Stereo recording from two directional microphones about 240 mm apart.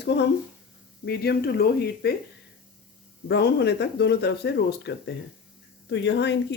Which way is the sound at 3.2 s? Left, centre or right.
Left.